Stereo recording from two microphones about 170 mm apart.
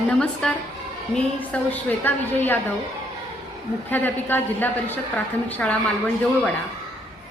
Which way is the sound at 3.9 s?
10° left (ahead or behind).